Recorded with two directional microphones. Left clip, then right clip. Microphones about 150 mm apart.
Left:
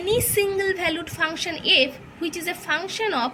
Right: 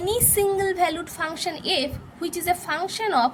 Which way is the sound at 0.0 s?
55° right (ahead or behind).